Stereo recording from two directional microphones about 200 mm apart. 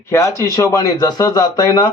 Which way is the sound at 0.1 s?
15° left (ahead or behind).